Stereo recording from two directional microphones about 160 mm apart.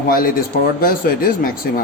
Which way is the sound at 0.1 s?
60° left (ahead or behind).